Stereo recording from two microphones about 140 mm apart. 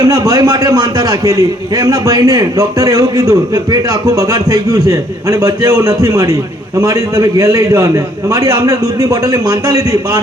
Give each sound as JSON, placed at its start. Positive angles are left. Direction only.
{"t": 0.0, "sound": "a man's voice", "side_deg": -25}